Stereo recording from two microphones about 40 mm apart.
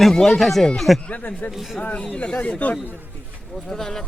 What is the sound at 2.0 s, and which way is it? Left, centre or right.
Speech, left.